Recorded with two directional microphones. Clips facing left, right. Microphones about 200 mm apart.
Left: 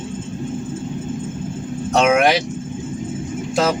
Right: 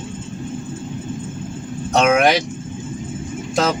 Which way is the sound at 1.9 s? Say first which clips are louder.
Even; 5° left (ahead or behind).